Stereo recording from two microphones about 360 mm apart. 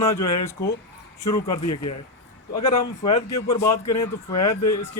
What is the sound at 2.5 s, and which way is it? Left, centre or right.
Speech, centre.